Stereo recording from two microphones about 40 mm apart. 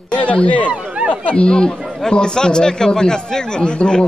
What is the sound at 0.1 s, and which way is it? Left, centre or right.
Speech, left.